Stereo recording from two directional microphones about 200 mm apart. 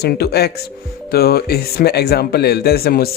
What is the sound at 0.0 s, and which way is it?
Speech, 50° left (ahead or behind).